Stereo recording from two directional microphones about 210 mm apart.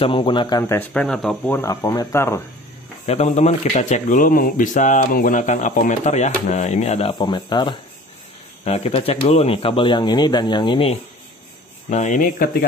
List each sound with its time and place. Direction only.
0.0 s speech: 25° left (ahead or behind)
3.1 s speech: 30° left (ahead or behind)
11.9 s speech: 35° left (ahead or behind)